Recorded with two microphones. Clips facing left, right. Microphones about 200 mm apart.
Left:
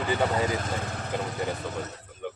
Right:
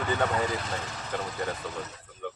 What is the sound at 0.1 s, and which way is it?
Speech, 30° left (ahead or behind).